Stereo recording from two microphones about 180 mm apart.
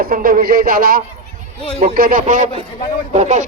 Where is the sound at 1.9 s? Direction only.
55° right (ahead or behind).